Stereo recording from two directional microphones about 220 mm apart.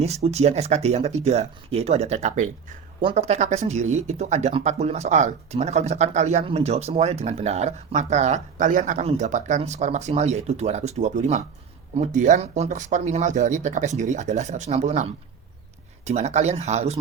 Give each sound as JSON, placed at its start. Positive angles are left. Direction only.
{"t": 0.0, "sound": "speech", "side_deg": -30}